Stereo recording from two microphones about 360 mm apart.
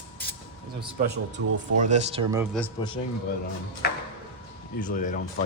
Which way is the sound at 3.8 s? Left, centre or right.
Left.